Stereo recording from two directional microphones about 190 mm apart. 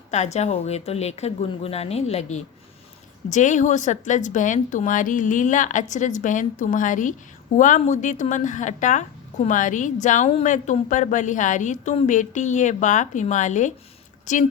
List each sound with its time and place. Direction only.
0.1 s a woman's voice: 35° left (ahead or behind)